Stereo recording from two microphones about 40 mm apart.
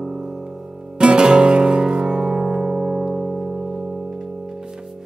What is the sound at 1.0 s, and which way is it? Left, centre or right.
Music, right.